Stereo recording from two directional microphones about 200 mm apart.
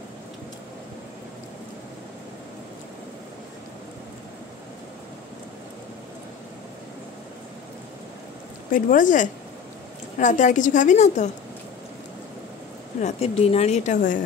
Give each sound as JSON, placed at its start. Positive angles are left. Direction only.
{"t": 8.7, "sound": "a woman's voice", "side_deg": 40}
{"t": 13.0, "sound": "a woman's voice", "side_deg": 30}